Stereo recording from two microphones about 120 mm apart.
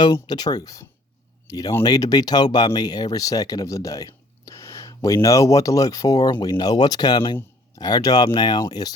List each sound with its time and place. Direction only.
0.0 s speech: 35° left (ahead or behind)